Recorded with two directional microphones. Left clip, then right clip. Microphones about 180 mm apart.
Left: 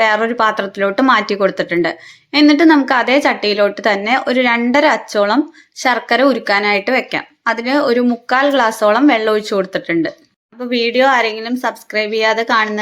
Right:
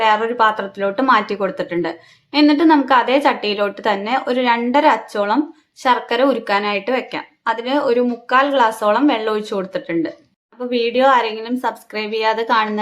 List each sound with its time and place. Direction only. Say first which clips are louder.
0.0 s a woman's voice: left 1 dB; 20° left (ahead or behind)